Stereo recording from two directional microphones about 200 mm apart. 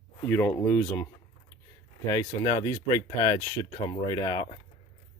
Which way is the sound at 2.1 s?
15° left (ahead or behind).